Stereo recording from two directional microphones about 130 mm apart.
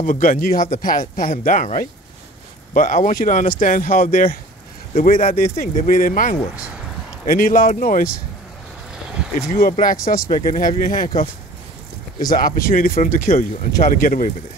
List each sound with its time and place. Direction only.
0.0 s speech: 90° left
8.9 s vehicle: 5° right (ahead or behind)
9.8 s speech: 90° left
12.3 s speech: 90° left